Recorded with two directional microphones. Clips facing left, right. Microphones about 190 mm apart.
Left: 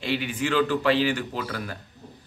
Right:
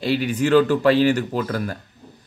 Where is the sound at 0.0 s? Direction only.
40° right (ahead or behind).